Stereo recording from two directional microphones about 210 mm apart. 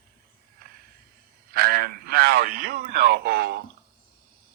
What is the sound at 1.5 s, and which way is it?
A man's voice, 45° right (ahead or behind).